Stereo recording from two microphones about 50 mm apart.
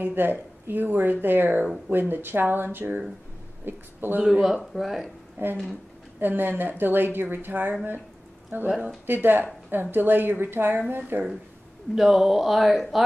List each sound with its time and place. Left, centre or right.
0.0 s a woman's voice: right
4.2 s speech: centre
5.4 s a woman's voice: right
8.6 s speech: centre
9.0 s speech: right
11.9 s speech: centre